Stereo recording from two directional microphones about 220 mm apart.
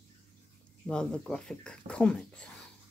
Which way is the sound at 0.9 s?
5° left (ahead or behind).